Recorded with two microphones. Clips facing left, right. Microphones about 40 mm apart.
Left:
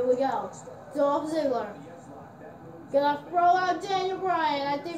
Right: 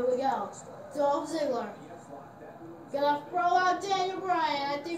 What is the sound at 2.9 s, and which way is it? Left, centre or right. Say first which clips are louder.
Speech: left 3 dB; centre.